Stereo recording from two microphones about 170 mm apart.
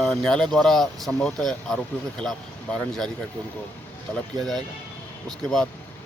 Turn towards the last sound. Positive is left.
turn(degrees=5)  # may be behind; listen again after turning